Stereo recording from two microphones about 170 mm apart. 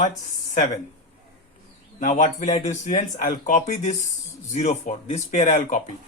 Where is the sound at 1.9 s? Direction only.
45° left (ahead or behind).